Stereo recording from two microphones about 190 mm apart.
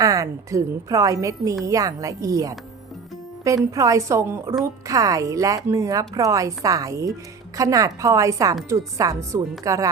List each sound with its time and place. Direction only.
0.0 s a woman's voice: 15° right (ahead or behind)